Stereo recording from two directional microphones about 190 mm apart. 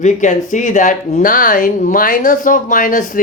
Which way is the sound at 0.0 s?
40° left (ahead or behind).